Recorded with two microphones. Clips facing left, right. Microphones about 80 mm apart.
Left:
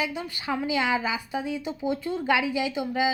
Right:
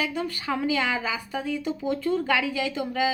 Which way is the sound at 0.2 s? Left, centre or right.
Centre.